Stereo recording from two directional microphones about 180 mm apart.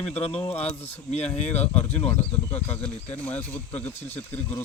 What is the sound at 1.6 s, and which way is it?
Speech, 10° left (ahead or behind).